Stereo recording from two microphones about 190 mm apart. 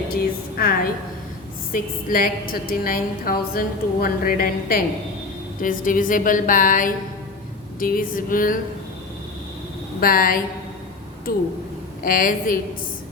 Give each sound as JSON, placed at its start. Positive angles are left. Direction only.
{"t": 0.1, "sound": "a sound", "side_deg": 50}
{"t": 1.7, "sound": "a woman's voice", "side_deg": 45}
{"t": 10.0, "sound": "a woman's voice", "side_deg": 50}